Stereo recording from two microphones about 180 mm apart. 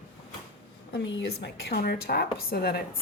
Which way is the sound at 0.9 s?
90° left.